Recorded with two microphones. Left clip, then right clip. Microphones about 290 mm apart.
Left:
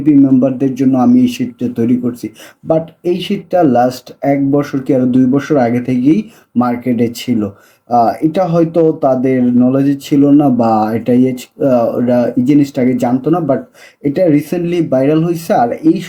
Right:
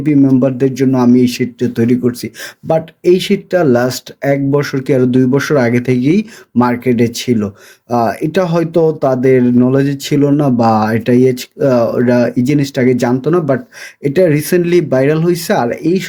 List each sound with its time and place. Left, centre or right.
0.3 s speech: right